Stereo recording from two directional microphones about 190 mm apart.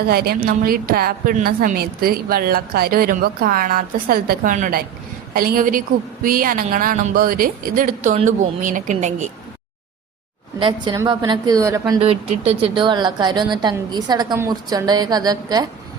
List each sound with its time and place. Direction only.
0.1 s a woman's voice: 55° right (ahead or behind); by 9.3 s 40° right (ahead or behind)
10.6 s a woman's voice: 25° right (ahead or behind)
11.9 s a woman's voice: 35° right (ahead or behind)